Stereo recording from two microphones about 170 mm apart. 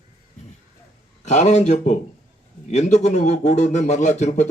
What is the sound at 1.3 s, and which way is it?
A man's voice, 45° left (ahead or behind).